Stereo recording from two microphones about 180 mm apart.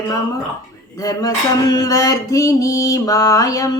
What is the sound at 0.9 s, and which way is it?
Mantra, 20° left (ahead or behind).